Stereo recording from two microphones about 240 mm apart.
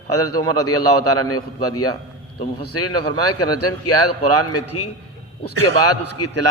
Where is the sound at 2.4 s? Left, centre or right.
Left.